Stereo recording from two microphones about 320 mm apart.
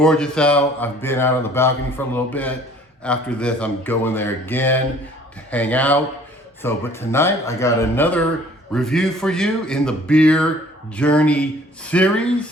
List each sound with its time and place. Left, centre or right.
0.0 s a man's voice: centre